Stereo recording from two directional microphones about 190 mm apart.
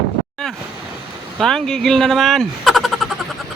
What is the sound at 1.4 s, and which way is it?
Speech, centre (ahead or behind).